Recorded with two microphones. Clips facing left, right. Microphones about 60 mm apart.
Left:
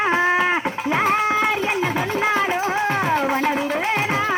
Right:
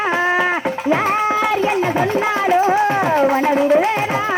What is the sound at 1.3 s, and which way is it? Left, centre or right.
Speech, centre.